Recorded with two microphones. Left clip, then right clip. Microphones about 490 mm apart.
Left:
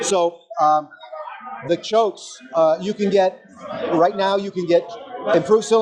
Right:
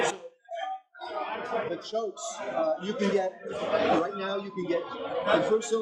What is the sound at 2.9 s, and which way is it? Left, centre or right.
A man's voice, left.